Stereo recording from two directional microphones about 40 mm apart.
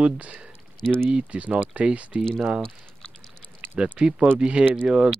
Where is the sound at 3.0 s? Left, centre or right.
Left.